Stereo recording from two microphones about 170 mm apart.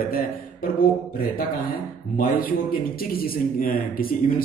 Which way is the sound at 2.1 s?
55° left (ahead or behind).